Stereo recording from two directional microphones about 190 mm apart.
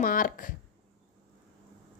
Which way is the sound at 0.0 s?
50° left (ahead or behind).